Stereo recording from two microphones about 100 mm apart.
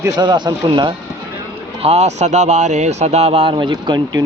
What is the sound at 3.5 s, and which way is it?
Speech, 45° right (ahead or behind).